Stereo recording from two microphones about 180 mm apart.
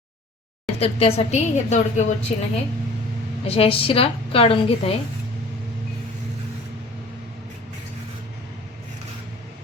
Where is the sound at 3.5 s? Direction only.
30° left (ahead or behind).